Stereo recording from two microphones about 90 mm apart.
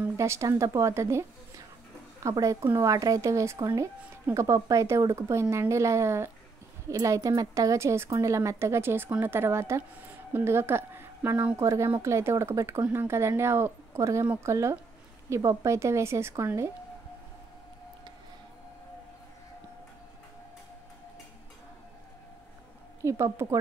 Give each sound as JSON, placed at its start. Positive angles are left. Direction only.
{"t": 0.2, "sound": "speech", "side_deg": -35}
{"t": 2.3, "sound": "speech", "side_deg": -35}
{"t": 3.5, "sound": "speech", "side_deg": -50}
{"t": 3.8, "sound": "a woman's voice", "side_deg": -35}
{"t": 23.0, "sound": "speech", "side_deg": -30}